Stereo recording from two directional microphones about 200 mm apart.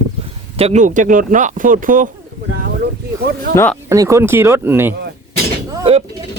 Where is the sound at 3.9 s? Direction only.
15° right (ahead or behind).